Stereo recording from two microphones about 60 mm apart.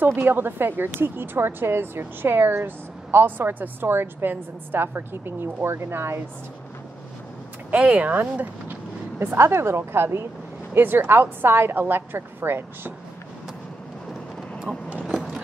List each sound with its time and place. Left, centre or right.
0.0 s speech: right
7.7 s speech: right
9.2 s a woman's voice: right
15.0 s a sound: centre